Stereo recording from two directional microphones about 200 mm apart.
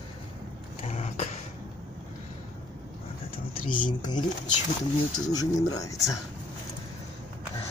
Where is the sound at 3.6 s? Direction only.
40° left (ahead or behind).